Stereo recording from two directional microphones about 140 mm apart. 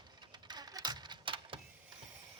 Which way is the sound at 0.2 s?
30° right (ahead or behind).